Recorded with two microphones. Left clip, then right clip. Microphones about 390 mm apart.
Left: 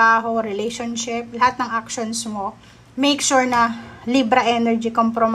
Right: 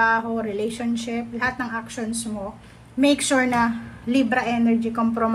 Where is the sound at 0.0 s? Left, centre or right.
Centre.